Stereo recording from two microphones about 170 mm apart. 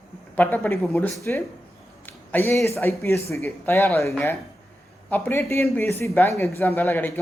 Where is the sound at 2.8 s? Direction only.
15° left (ahead or behind).